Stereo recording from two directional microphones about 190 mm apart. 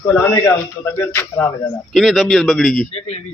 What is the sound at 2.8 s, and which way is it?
Speech, 35° left (ahead or behind).